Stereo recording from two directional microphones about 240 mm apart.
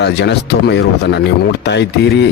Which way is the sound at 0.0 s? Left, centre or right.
Left.